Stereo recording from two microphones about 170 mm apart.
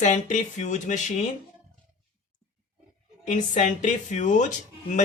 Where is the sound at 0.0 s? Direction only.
45° left (ahead or behind).